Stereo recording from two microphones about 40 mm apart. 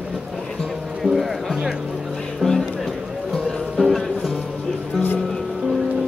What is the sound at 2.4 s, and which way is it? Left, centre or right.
Music, left.